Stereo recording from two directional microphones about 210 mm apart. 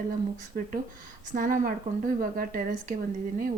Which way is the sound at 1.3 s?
40° right (ahead or behind).